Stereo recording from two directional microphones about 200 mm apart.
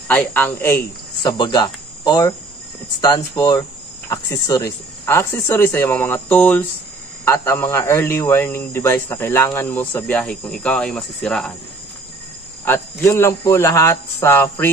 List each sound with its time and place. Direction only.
0.1 s speech: 10° left (ahead or behind)
1.4 s cricket: 20° left (ahead or behind)
3.0 s speech: 20° left (ahead or behind); by 11.5 s 5° left (ahead or behind)
12.6 s speech: 10° left (ahead or behind)